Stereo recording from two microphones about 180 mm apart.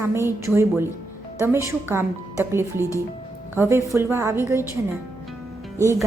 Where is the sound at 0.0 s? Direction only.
15° right (ahead or behind).